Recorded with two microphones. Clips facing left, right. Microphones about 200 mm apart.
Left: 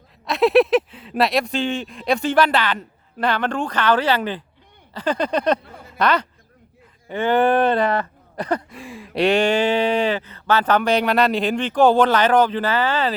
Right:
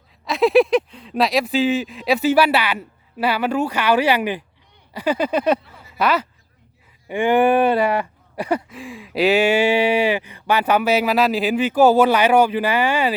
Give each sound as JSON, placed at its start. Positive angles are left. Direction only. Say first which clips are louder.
{"t": 0.3, "sound": "speech", "louder": "even", "side_deg": 0}
{"t": 5.6, "sound": "a sound", "louder": "left 5 dB", "side_deg": 50}
{"t": 6.0, "sound": "speech", "louder": "even", "side_deg": -5}